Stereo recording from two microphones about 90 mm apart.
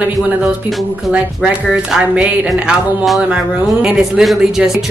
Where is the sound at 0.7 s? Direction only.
Centre (ahead or behind).